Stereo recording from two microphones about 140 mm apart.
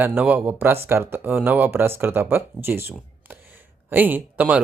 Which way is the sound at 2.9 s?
15° right (ahead or behind).